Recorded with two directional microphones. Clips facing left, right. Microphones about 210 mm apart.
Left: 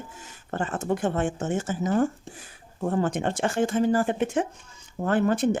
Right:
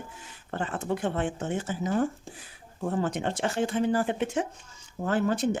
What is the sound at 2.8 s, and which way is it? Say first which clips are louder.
Speech: left 3 dB; 50° left (ahead or behind).